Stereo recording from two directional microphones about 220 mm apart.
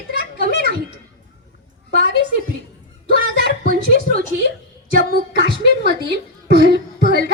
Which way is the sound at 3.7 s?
40° right (ahead or behind).